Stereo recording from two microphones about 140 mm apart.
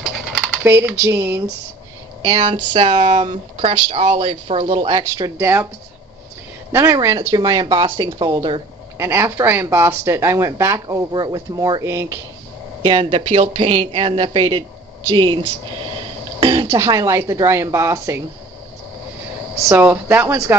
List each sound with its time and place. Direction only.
0.7 s speech: 15° right (ahead or behind)
2.2 s speech: 40° right (ahead or behind)
2.9 s speech: 50° right (ahead or behind)
5.1 s speech: 20° right (ahead or behind)
6.7 s speech: 20° right (ahead or behind); by 8.6 s 35° right (ahead or behind)
8.9 s speech: 20° right (ahead or behind)
12.8 s speech: 40° right (ahead or behind)
16.3 s throat clearing: 35° right (ahead or behind)
16.6 s speech: 20° right (ahead or behind)
19.7 s speech: 15° right (ahead or behind)